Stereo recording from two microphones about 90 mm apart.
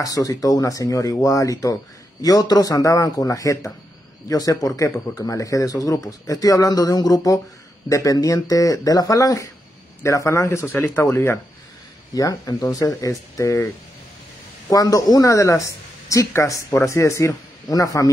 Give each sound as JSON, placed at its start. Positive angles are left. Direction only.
{"t": 0.0, "sound": "speech", "side_deg": 40}
{"t": 12.1, "sound": "speech", "side_deg": 45}
{"t": 14.7, "sound": "speech", "side_deg": 40}